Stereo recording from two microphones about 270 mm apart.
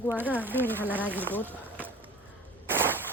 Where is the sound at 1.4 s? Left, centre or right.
Centre.